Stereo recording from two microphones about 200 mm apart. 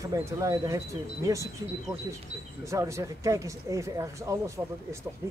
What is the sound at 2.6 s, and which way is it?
Speech, 15° right (ahead or behind).